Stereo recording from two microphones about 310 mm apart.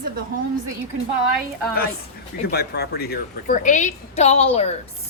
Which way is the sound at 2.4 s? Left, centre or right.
Left.